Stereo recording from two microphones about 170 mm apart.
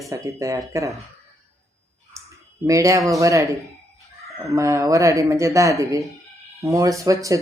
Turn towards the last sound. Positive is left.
turn(degrees=-20)  # may be behind; listen again after turning